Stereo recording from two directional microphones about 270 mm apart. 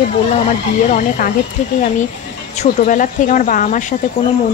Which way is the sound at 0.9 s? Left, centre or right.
Left.